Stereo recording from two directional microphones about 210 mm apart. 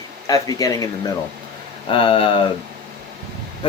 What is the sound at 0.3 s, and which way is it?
Speech, 15° left (ahead or behind).